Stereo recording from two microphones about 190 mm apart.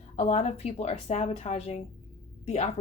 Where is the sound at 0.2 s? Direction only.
35° left (ahead or behind).